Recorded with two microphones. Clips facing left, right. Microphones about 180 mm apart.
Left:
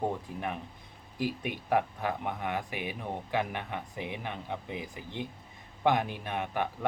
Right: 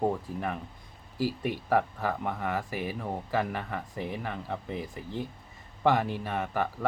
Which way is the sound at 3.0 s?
Centre (ahead or behind).